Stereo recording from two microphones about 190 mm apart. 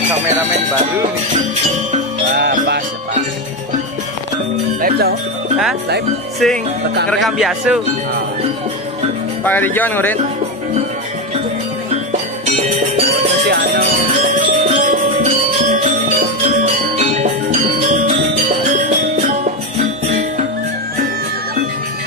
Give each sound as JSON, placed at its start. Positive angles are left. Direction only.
{"t": 4.8, "sound": "music", "side_deg": -55}
{"t": 6.4, "sound": "speech", "side_deg": 0}
{"t": 9.4, "sound": "speech", "side_deg": 10}
{"t": 12.4, "sound": "music", "side_deg": -30}
{"t": 13.5, "sound": "music", "side_deg": -55}
{"t": 14.4, "sound": "music", "side_deg": -35}
{"t": 17.0, "sound": "music", "side_deg": -40}